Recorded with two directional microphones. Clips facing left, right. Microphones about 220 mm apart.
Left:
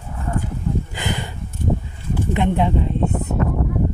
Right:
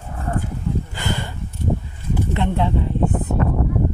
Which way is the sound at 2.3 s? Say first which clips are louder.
Left 3 dB; 15° left (ahead or behind).